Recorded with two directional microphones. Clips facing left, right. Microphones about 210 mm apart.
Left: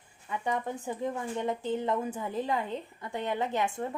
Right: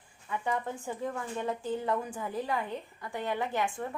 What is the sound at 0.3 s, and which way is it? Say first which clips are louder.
Speech: left 1 dB; 20° left (ahead or behind).